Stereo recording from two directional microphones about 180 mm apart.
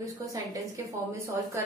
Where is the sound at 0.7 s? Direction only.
15° right (ahead or behind).